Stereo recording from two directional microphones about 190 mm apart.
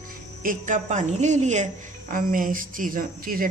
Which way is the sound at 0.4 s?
45° right (ahead or behind).